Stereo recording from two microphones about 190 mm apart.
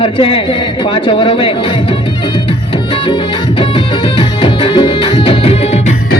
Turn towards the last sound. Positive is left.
turn(degrees=30)  # may be behind; listen again after turning